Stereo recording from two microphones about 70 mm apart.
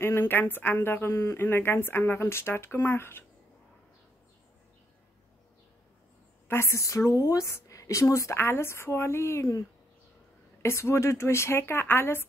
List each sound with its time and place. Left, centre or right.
0.0 s speech: left
1.1 s a woman's voice: left
1.4 s speech: left
6.4 s a woman's voice: left
8.4 s speech: left
10.6 s speech: left